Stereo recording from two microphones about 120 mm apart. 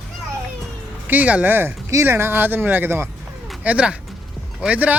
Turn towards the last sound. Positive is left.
turn(degrees=-10)  # may be behind; listen again after turning